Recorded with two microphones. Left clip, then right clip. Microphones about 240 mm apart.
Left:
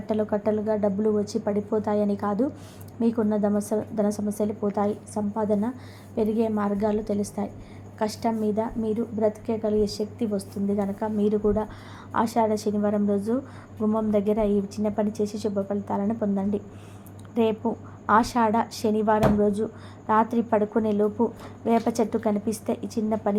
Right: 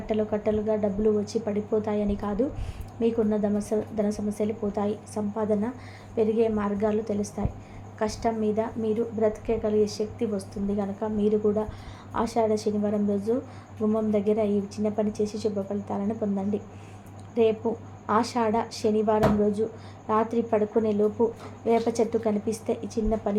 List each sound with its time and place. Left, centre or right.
0.0 s a woman's voice: centre